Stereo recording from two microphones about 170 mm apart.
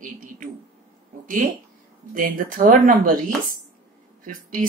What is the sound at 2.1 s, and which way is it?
Speech, 55° right (ahead or behind).